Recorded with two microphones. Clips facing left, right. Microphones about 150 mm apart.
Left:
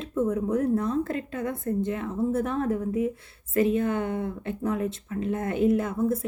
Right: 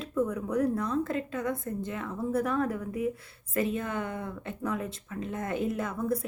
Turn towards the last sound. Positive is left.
turn(degrees=25)  # may be behind; listen again after turning